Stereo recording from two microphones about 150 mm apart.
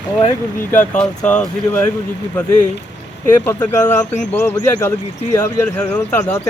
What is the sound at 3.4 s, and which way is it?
Speech, 15° left (ahead or behind).